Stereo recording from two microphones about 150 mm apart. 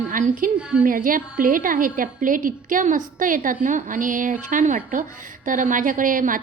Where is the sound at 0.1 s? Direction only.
65° right (ahead or behind).